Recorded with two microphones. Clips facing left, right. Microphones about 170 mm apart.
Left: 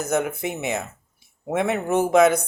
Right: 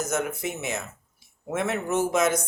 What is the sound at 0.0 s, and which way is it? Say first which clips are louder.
Speech: left 4 dB; 60° left (ahead or behind).